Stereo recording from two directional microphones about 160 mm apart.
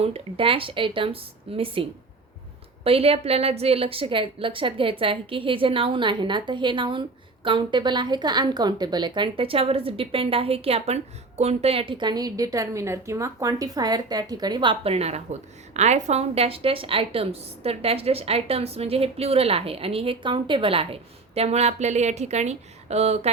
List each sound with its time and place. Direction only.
0.0 s a woman's voice: 35° right (ahead or behind)